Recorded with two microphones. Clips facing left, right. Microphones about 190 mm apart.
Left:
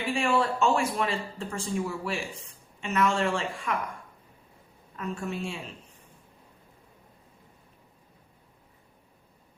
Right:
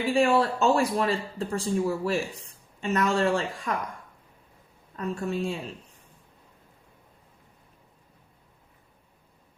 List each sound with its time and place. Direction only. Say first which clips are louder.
0.1 s speech: right 4 dB; 35° right (ahead or behind)
4.9 s speech: right 4 dB; 35° right (ahead or behind)